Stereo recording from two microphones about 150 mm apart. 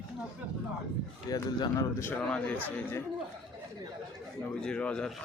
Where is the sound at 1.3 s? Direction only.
25° left (ahead or behind).